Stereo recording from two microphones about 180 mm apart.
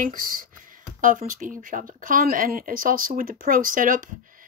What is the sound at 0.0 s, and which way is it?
A woman's voice, 50° right (ahead or behind).